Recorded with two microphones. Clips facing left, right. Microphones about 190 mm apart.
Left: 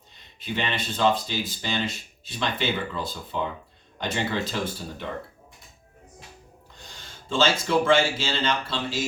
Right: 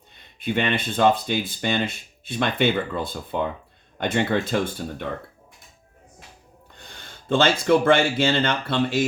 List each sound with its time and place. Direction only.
0.3 s speech: 55° right (ahead or behind)
6.7 s speech: 60° right (ahead or behind)